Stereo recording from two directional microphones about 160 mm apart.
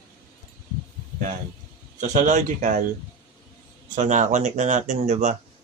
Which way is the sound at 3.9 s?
50° right (ahead or behind).